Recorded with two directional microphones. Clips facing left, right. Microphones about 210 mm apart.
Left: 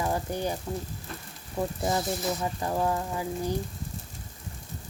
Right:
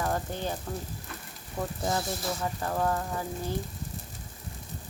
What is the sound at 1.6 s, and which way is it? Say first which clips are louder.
Frying: left 3 dB; 10° left (ahead or behind).